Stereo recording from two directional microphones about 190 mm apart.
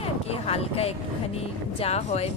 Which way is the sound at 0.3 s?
35° left (ahead or behind).